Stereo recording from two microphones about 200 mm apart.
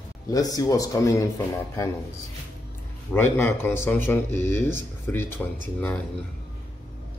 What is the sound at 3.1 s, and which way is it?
A man's voice, 10° left (ahead or behind).